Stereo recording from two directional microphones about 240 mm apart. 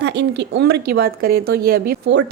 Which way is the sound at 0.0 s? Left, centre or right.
Right.